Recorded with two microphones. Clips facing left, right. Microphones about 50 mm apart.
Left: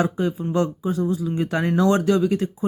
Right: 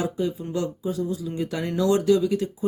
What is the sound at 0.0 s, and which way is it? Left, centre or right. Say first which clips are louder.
Speech: left 4 dB; left.